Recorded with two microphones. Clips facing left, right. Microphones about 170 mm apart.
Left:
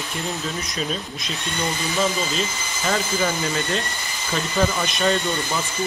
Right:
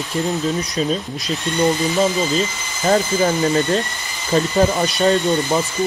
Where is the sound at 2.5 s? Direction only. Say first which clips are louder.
Even; centre (ahead or behind).